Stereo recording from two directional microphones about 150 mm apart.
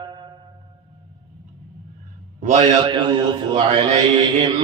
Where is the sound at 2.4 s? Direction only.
55° right (ahead or behind).